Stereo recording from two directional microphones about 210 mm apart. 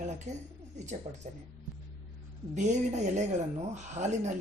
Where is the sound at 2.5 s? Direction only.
35° right (ahead or behind).